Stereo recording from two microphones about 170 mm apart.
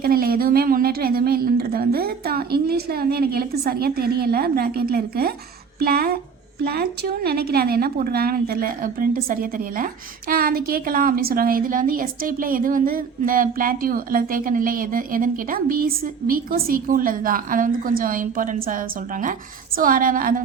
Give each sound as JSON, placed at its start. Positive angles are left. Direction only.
{"t": 0.0, "sound": "a woman's voice", "side_deg": -60}